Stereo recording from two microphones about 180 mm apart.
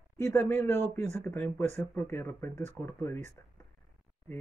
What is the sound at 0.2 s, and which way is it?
Speech, 15° left (ahead or behind).